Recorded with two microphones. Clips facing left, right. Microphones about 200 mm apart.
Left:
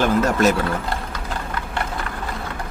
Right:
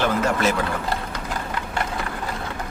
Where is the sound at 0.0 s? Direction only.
40° left (ahead or behind).